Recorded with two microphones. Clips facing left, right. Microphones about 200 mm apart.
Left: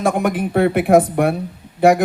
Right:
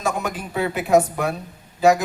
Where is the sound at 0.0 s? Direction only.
55° left (ahead or behind).